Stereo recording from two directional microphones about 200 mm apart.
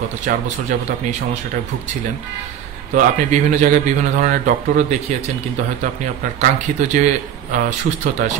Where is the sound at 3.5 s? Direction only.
40° right (ahead or behind).